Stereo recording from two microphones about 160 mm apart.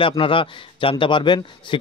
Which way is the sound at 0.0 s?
35° left (ahead or behind).